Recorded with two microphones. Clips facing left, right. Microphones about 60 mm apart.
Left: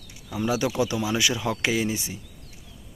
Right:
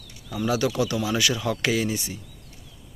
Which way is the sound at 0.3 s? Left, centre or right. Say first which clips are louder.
Right 1 dB; centre.